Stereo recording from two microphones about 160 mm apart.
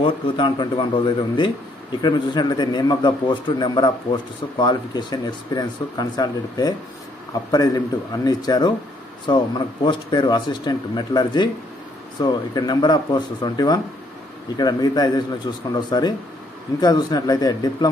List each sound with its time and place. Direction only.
0.0 s a man's voice: 30° left (ahead or behind)